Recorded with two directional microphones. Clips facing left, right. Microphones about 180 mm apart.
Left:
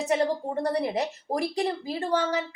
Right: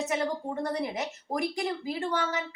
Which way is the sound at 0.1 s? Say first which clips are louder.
Left 5 dB; 35° left (ahead or behind).